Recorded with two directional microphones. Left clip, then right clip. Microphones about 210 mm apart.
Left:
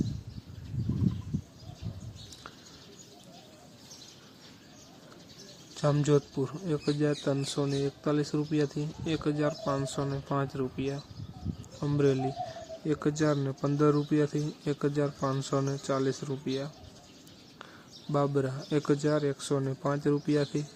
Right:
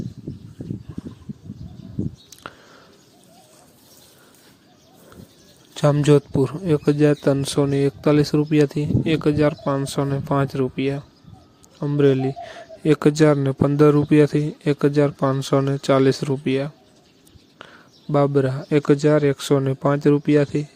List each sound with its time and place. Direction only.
5.7 s speech: 35° right (ahead or behind)
12.8 s speech: 40° right (ahead or behind)
18.1 s speech: 35° right (ahead or behind)